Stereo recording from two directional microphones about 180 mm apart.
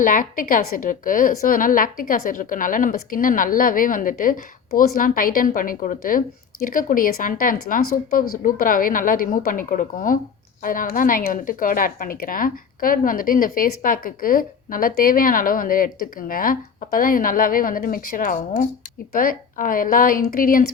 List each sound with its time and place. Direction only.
0.0 s speech: 50° left (ahead or behind)